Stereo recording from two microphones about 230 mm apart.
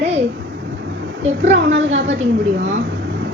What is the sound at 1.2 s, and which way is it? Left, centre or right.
Speech, right.